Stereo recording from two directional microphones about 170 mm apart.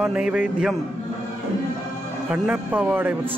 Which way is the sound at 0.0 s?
5° right (ahead or behind).